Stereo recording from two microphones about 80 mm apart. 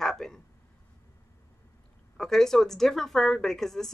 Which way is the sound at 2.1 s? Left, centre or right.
Centre.